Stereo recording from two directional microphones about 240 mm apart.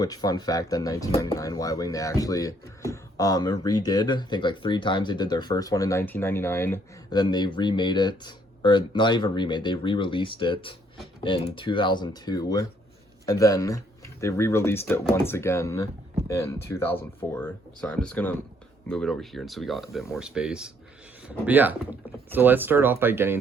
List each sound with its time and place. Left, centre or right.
0.0 s speech: centre